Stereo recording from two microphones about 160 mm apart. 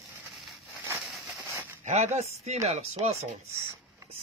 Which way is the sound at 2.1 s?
45° right (ahead or behind).